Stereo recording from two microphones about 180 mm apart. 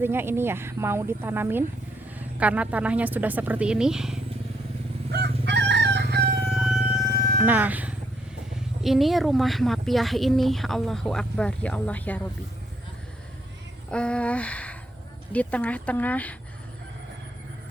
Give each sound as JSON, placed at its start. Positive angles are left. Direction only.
{"t": 0.0, "sound": "a woman's voice", "side_deg": -10}
{"t": 5.1, "sound": "chicken", "side_deg": -70}
{"t": 6.5, "sound": "music", "side_deg": -5}
{"t": 7.3, "sound": "speech", "side_deg": -10}
{"t": 13.9, "sound": "a sound", "side_deg": 5}
{"t": 15.3, "sound": "speech", "side_deg": 10}